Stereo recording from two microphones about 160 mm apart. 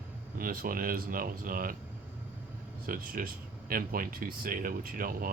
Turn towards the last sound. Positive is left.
turn(degrees=-65)  # may be behind; listen again after turning